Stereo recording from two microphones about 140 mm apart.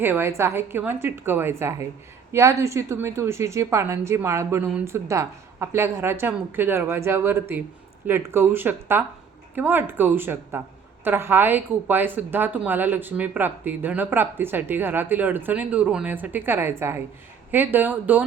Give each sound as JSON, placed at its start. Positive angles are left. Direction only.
{"t": 0.0, "sound": "a woman's voice", "side_deg": -15}